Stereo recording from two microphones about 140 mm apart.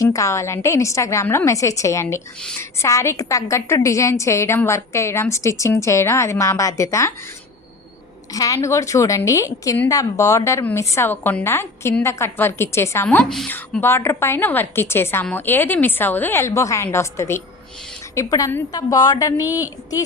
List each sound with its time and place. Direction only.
0.0 s a woman's voice: 20° left (ahead or behind)
8.3 s a woman's voice: 25° left (ahead or behind)
13.1 s a woman's voice: 5° left (ahead or behind)
13.5 s a woman's voice: 15° left (ahead or behind)